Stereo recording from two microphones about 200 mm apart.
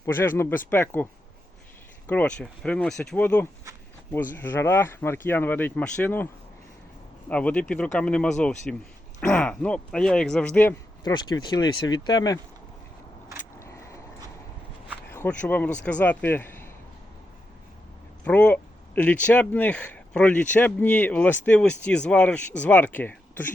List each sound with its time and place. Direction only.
0.0 s speech: 10° left (ahead or behind)
2.0 s speech: 5° left (ahead or behind)
7.3 s speech: 5° left (ahead or behind)
11.0 s speech: 20° left (ahead or behind)
13.6 s vehicle: 15° left (ahead or behind)
15.1 s speech: 10° left (ahead or behind)
18.3 s speech: 5° left (ahead or behind)